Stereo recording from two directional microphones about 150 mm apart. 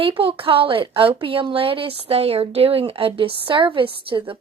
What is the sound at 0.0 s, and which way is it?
A woman's voice, 35° right (ahead or behind).